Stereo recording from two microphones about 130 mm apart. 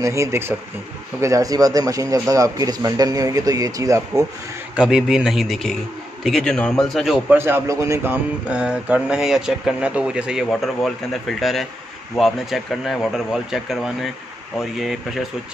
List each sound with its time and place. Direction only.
0.0 s a man's voice: 20° right (ahead or behind)
4.7 s speech: 5° right (ahead or behind)
7.2 s speech: 15° right (ahead or behind); by 15.2 s centre (ahead or behind)